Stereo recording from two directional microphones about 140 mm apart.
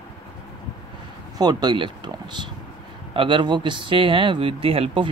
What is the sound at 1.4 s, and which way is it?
Speech, 30° right (ahead or behind).